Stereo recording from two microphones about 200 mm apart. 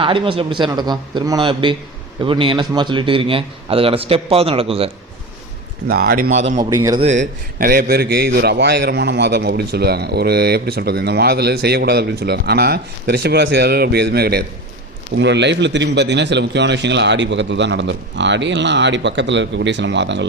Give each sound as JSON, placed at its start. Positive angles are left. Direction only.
{"t": 0.0, "sound": "a man's voice", "side_deg": -25}
{"t": 5.9, "sound": "a man's voice", "side_deg": -50}
{"t": 6.3, "sound": "a man's voice", "side_deg": -35}
{"t": 6.6, "sound": "a man's voice", "side_deg": -20}
{"t": 7.0, "sound": "a man's voice", "side_deg": -35}